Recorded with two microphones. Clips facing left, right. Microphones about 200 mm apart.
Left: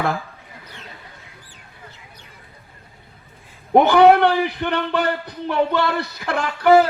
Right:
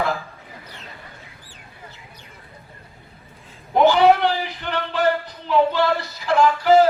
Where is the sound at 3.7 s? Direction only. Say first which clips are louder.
Left 3 dB; 55° left (ahead or behind).